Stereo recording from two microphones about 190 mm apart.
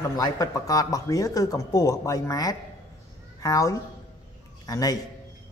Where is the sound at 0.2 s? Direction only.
20° left (ahead or behind).